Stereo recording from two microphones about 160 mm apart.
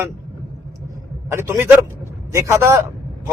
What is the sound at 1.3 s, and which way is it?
A man's voice, 15° right (ahead or behind).